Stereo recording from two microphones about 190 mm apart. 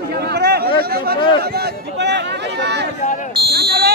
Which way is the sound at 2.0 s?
65° right (ahead or behind).